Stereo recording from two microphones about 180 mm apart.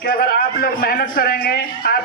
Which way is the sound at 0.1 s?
50° left (ahead or behind).